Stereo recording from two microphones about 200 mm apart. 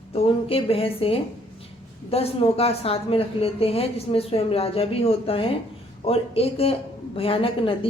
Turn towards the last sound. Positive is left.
turn(degrees=25)  # may be behind; listen again after turning